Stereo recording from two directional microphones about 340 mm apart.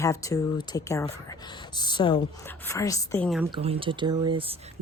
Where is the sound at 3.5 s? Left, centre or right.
Centre.